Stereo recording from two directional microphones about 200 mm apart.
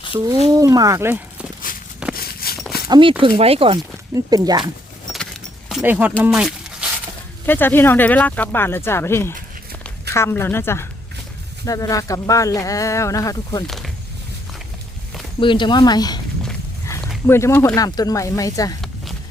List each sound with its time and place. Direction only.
0.5 s speech: 20° right (ahead or behind)
1.7 s walk: 45° left (ahead or behind)
2.1 s a sound: 50° left (ahead or behind)
2.9 s speech: 25° right (ahead or behind)
5.1 s keys jangling: centre (ahead or behind)
6.2 s a sound: 5° right (ahead or behind)
7.4 s speech: 10° left (ahead or behind)
13.7 s speech: centre (ahead or behind)
15.4 s speech: 25° left (ahead or behind)
17.2 s speech: 10° left (ahead or behind)